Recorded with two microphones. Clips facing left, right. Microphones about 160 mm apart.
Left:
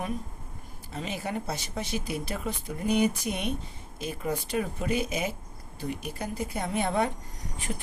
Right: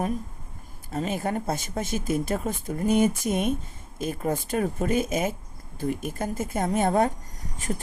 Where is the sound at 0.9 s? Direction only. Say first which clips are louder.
Right 6 dB; 50° right (ahead or behind).